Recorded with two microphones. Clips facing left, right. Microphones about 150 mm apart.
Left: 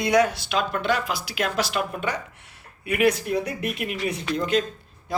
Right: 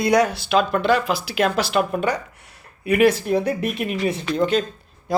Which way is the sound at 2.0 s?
35° right (ahead or behind).